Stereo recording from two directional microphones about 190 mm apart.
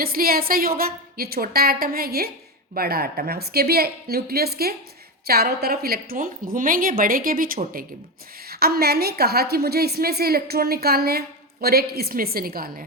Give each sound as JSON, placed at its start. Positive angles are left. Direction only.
{"t": 0.0, "sound": "a woman's voice", "side_deg": -50}